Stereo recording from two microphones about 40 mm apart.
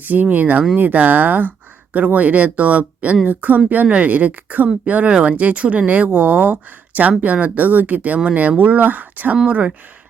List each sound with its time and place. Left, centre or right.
0.0 s speech: right
9.5 s speech: right